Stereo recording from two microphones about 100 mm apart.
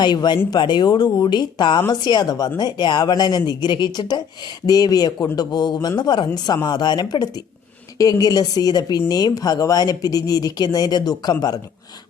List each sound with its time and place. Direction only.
0.0 s speech: 50° left (ahead or behind)